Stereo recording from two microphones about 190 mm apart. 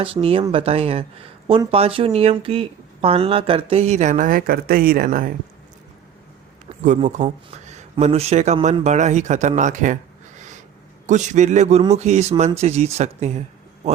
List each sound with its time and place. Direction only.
0.0 s speech: 30° right (ahead or behind); by 5.3 s 45° right (ahead or behind)
6.8 s speech: 40° right (ahead or behind)
11.0 s speech: 40° right (ahead or behind)